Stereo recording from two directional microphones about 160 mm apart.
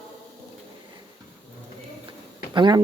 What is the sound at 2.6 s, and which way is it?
Speech, 25° right (ahead or behind).